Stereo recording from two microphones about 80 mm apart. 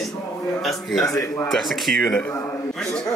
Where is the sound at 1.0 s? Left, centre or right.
Left.